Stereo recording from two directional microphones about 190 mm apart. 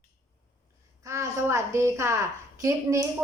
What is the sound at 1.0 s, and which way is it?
A woman's voice, 15° right (ahead or behind).